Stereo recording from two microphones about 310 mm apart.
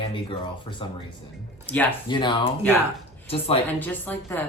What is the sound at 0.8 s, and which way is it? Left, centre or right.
Speech, centre.